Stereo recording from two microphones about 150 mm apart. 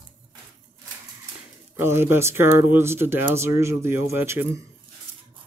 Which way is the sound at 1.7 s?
15° right (ahead or behind).